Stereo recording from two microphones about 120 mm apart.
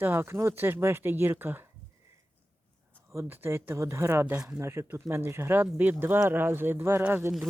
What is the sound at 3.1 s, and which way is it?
Speech, 15° right (ahead or behind).